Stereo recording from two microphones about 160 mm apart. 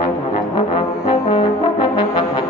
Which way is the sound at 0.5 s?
30° left (ahead or behind).